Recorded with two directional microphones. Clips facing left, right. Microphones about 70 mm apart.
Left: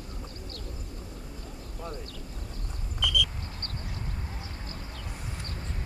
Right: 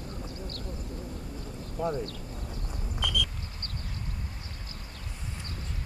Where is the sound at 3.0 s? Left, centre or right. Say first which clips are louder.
Left 3 dB; right.